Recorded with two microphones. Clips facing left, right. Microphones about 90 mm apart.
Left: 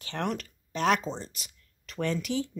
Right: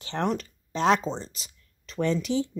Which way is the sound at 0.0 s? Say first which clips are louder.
Right 4 dB; 25° right (ahead or behind).